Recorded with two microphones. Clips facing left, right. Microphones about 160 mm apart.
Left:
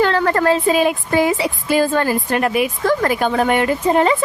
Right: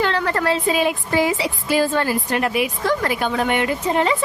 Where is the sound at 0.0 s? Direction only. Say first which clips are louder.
Left 5 dB; 45° left (ahead or behind).